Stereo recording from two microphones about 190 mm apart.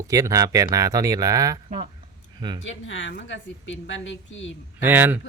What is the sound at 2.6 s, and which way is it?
A woman's voice, 75° left (ahead or behind).